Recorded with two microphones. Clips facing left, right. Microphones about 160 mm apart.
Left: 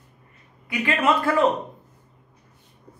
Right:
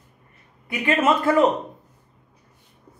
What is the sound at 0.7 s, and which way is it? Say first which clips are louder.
Speech: right 2 dB; 20° right (ahead or behind).